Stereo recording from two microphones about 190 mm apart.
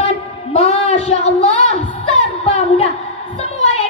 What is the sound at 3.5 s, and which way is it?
Music, 35° left (ahead or behind).